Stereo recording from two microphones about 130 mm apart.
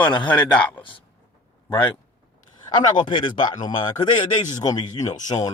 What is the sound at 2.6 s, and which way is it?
Speech, 35° left (ahead or behind).